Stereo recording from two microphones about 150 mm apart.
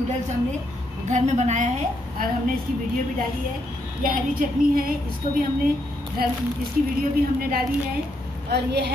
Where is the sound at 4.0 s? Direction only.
65° right (ahead or behind).